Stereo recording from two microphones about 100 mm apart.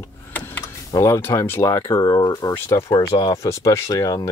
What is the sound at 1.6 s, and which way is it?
Speech, 35° left (ahead or behind).